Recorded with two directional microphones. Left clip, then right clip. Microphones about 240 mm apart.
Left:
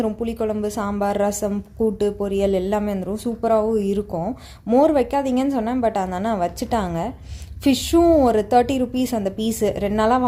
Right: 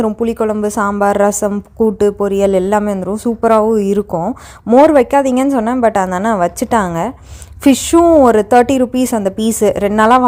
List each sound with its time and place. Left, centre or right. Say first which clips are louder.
0.0 s a woman's voice: right 8 dB; right